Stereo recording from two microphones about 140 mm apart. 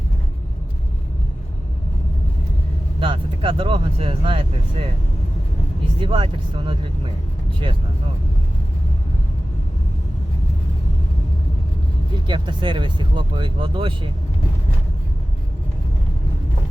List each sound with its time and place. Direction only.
3.0 s speech: 40° right (ahead or behind)
6.0 s speech: 40° right (ahead or behind)
12.3 s speech: 35° right (ahead or behind)